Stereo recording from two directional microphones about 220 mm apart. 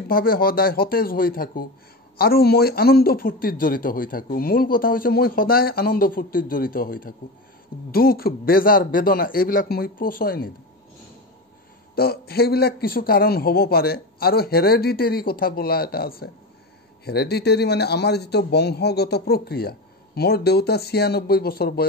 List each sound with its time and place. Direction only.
0.1 s speech: 40° left (ahead or behind)
11.9 s a man's voice: 45° left (ahead or behind)